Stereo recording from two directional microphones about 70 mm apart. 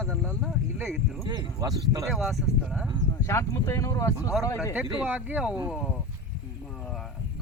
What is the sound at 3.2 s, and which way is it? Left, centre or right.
Speech, left.